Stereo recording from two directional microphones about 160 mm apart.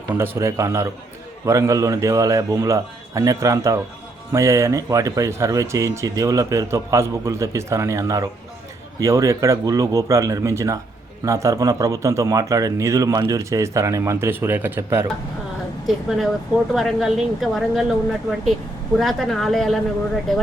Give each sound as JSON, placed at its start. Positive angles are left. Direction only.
{"t": 0.1, "sound": "speech", "side_deg": -15}
{"t": 15.9, "sound": "speech", "side_deg": 0}